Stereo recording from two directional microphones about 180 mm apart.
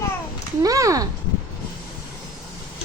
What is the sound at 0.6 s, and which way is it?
Speech, 20° right (ahead or behind).